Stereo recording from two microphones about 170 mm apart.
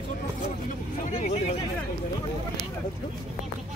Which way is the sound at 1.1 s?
45° left (ahead or behind).